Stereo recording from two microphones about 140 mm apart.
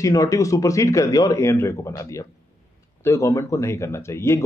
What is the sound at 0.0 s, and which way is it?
Speech, 25° left (ahead or behind).